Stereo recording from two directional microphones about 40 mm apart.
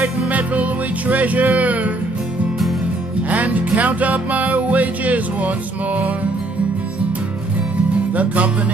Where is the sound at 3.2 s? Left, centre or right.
Right.